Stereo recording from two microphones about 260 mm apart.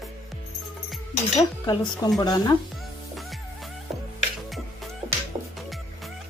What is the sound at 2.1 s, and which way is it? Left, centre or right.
Speech, centre.